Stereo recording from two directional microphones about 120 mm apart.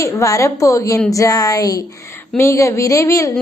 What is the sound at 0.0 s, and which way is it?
A woman's voice, 25° left (ahead or behind).